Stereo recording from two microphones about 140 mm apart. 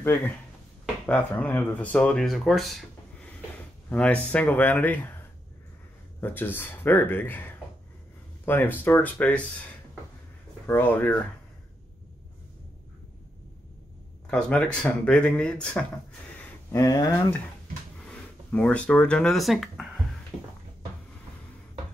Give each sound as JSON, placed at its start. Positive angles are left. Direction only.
{"t": 0.0, "sound": "speech", "side_deg": 15}
{"t": 6.2, "sound": "speech", "side_deg": 15}
{"t": 10.7, "sound": "speech", "side_deg": 15}
{"t": 14.3, "sound": "speech", "side_deg": 10}
{"t": 16.7, "sound": "speech", "side_deg": 25}
{"t": 18.0, "sound": "speech", "side_deg": 10}
{"t": 20.3, "sound": "a sound", "side_deg": 5}